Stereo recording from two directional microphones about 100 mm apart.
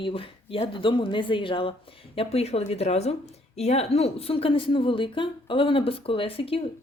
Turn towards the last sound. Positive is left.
turn(degrees=70)  # may be behind; listen again after turning